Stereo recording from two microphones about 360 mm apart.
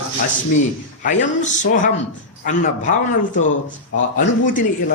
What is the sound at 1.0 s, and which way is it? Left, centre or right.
A man's voice, left.